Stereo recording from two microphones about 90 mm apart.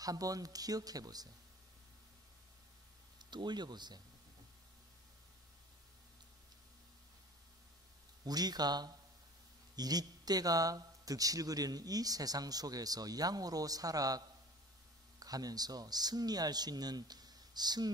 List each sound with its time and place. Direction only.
0.0 s speech: 40° right (ahead or behind)
3.2 s speech: 55° right (ahead or behind)
8.2 s speech: 50° right (ahead or behind)